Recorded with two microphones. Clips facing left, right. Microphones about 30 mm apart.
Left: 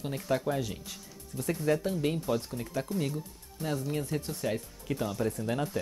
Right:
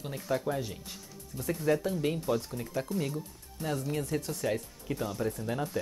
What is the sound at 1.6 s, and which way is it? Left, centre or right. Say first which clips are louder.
Speech: even; centre.